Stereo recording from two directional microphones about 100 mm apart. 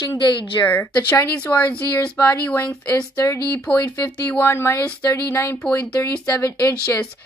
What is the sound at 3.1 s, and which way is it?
Speech, 30° left (ahead or behind).